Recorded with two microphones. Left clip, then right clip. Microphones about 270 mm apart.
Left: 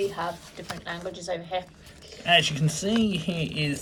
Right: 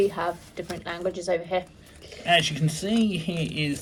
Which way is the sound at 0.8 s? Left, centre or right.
Centre.